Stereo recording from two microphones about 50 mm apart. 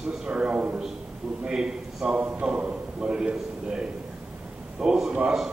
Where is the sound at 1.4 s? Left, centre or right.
Centre.